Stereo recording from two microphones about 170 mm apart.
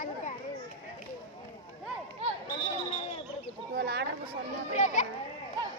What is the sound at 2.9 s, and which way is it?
Speech, 35° left (ahead or behind).